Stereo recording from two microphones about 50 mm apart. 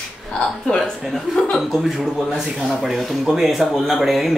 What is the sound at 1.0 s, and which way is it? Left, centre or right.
Speech, centre.